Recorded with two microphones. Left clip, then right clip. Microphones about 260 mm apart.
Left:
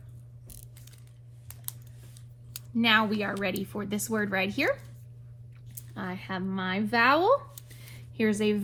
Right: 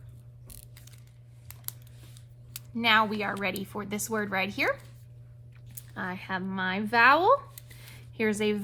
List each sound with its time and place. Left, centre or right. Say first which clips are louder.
2.7 s speech: right 1 dB; right
5.9 s speech: right 2 dB; right